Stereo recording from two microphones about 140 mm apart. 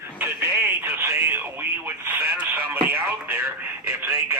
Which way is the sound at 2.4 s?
10° right (ahead or behind).